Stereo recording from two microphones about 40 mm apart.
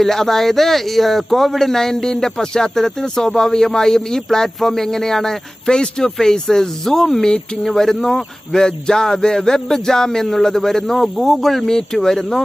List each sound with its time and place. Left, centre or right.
0.0 s speech: centre
7.2 s speech: centre